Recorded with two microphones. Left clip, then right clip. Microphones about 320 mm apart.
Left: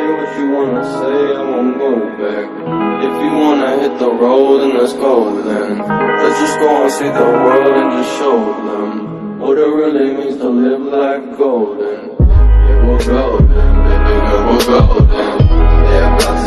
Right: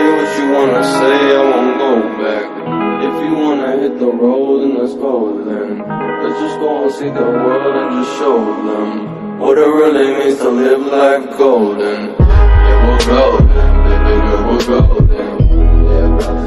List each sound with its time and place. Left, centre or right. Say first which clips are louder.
0.0 s music: right 4 dB; right
1.0 s music: right 5 dB; right
2.8 s music: left 1 dB; centre; by 4.8 s left
5.5 s speech: left 4 dB; left
7.2 s music: left 5 dB; left; by 8.5 s centre
9.5 s speech: right 3 dB; right
10.9 s mantra: right 4 dB; right
12.8 s music: right 3 dB; centre
14.0 s music: left 2 dB; centre